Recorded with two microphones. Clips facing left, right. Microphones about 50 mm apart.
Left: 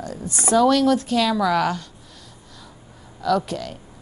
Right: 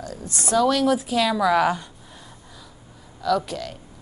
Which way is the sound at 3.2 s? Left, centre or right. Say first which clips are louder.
Left 1 dB; centre.